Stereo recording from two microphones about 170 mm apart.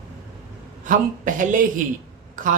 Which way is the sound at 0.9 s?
50° right (ahead or behind).